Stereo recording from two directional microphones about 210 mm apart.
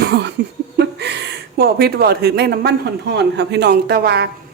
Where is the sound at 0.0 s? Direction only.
55° right (ahead or behind).